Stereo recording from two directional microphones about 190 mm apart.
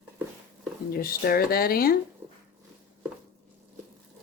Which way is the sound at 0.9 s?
55° left (ahead or behind).